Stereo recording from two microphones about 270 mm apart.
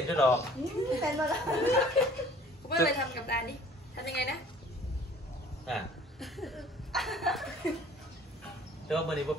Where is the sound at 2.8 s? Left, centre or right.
Left.